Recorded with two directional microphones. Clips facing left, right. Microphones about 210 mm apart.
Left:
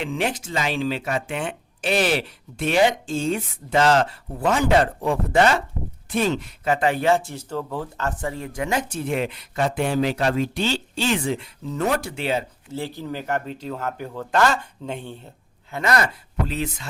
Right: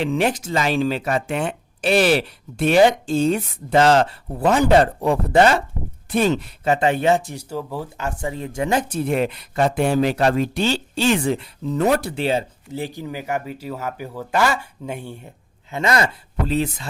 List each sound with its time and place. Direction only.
0.0 s speech: 40° right (ahead or behind); by 8.6 s 20° right (ahead or behind)
8.6 s speech: 35° right (ahead or behind)
12.7 s speech: 15° right (ahead or behind)
15.7 s speech: 25° right (ahead or behind)